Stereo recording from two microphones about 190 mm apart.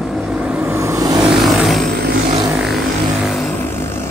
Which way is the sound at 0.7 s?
15° right (ahead or behind).